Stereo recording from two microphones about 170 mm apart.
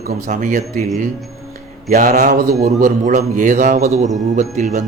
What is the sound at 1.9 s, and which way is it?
A man's voice, 55° right (ahead or behind).